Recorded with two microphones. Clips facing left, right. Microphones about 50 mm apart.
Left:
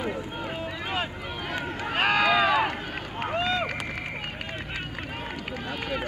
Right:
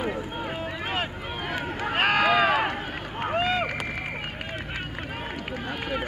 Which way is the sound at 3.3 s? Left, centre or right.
Right.